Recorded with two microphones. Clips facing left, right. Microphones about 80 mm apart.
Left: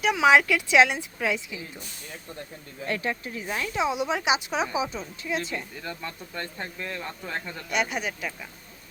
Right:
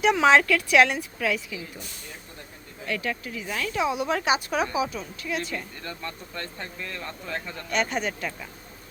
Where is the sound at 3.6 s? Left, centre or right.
Left.